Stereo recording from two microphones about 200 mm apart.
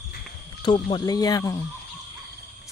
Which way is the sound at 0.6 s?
25° left (ahead or behind).